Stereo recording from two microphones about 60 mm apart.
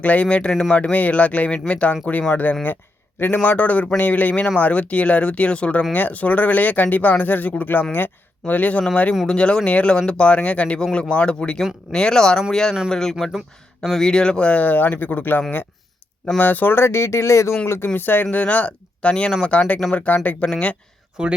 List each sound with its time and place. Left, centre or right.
0.0 s a man's voice: left
9.2 s speech: centre; by 17.5 s left
17.7 s speech: left
21.2 s speech: centre